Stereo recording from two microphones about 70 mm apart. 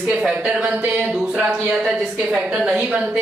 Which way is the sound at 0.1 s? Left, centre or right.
Centre.